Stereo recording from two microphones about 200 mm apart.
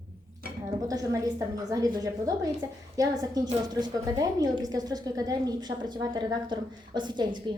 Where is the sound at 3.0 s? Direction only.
20° right (ahead or behind).